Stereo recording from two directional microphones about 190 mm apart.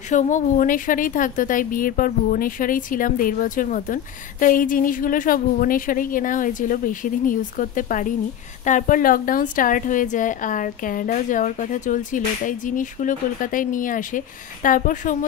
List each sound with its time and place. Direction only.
0.1 s a woman's voice: 40° left (ahead or behind)